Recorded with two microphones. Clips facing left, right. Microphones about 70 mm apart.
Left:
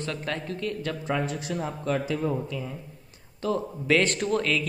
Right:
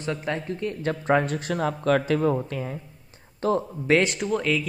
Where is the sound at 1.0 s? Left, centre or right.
Right.